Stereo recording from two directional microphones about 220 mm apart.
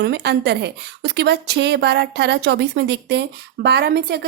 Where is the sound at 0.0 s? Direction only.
50° right (ahead or behind).